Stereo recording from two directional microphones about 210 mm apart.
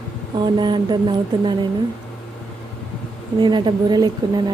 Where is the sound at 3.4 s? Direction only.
20° right (ahead or behind).